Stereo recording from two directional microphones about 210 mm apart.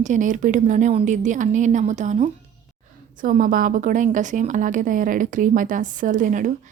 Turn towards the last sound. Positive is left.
turn(degrees=-40)  # may be behind; listen again after turning